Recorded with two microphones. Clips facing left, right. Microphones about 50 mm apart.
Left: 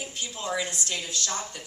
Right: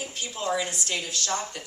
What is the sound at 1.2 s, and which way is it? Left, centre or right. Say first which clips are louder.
Speech: right 3 dB; right.